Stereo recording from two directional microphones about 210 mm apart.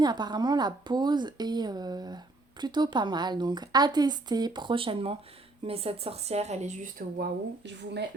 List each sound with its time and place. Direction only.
0.0 s speech: 20° right (ahead or behind); by 7.3 s 35° right (ahead or behind)